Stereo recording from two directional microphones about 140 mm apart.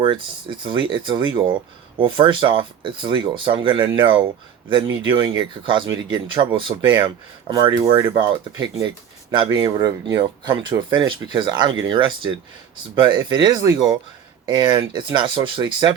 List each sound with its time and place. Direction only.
0.0 s speech: 35° right (ahead or behind)
9.3 s speech: 35° right (ahead or behind)
9.6 s speech: 25° right (ahead or behind)